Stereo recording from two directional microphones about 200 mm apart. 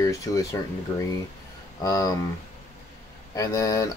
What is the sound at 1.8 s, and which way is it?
Speech, 15° left (ahead or behind).